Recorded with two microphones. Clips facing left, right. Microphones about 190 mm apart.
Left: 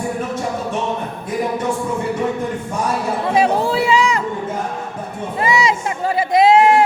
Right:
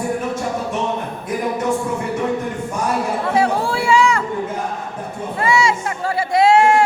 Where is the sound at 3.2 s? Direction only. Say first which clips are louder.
Left 3 dB; 20° left (ahead or behind).